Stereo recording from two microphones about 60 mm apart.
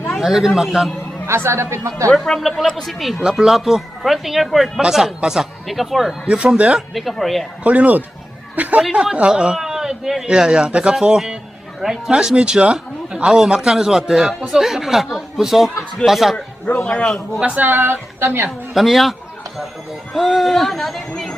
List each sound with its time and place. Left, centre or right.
0.1 s a man's voice: centre
1.3 s speech: right
2.1 s speech: centre
6.2 s speech: centre
6.7 s speech: centre
7.6 s speech: right
8.8 s a man's voice: centre
11.8 s speech: centre
17.4 s speech: right
17.7 s a woman's voice: right
18.4 s speech: centre
20.1 s speech: centre